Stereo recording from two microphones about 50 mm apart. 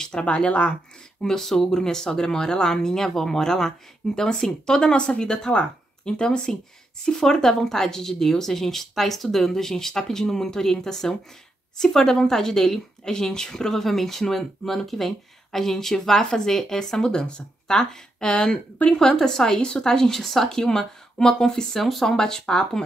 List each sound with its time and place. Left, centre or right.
0.0 s speech: centre
1.2 s speech: centre